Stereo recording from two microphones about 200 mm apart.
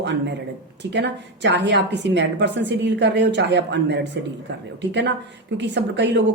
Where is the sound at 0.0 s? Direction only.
60° right (ahead or behind).